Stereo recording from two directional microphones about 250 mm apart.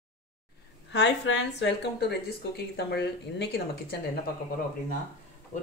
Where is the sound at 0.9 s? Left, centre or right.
Left.